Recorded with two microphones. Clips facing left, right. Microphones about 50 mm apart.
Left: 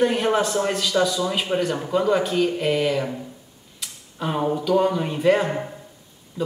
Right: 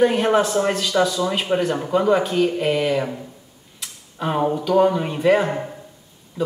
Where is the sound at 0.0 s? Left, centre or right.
Centre.